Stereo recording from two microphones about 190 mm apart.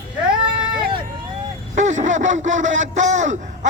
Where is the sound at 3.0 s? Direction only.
40° right (ahead or behind).